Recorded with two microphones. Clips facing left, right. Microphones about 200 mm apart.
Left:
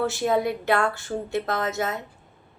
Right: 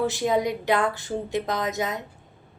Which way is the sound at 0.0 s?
15° right (ahead or behind).